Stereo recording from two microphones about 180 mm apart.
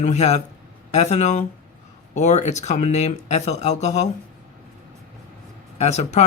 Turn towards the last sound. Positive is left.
turn(degrees=40)  # may be behind; listen again after turning